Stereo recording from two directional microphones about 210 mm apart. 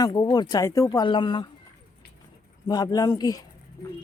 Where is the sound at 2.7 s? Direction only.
20° left (ahead or behind).